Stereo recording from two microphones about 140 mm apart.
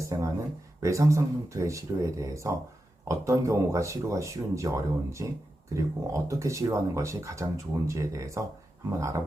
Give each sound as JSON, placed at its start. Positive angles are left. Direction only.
{"t": 0.0, "sound": "speech", "side_deg": -20}